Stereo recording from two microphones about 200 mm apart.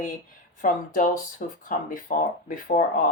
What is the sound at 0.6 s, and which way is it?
Speech, 40° left (ahead or behind).